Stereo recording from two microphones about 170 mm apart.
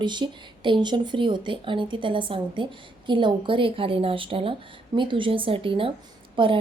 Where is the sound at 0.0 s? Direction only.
25° right (ahead or behind).